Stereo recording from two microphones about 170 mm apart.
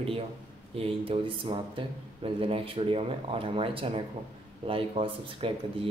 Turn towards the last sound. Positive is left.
turn(degrees=-30)  # may be behind; listen again after turning